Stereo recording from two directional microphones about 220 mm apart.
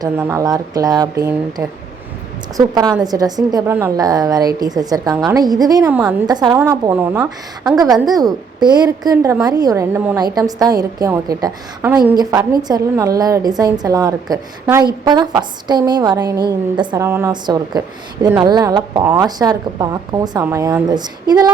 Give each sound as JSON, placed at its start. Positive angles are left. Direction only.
{"t": 0.0, "sound": "a woman's voice", "side_deg": -15}
{"t": 6.2, "sound": "a woman's voice", "side_deg": -15}
{"t": 8.0, "sound": "a woman's voice", "side_deg": -15}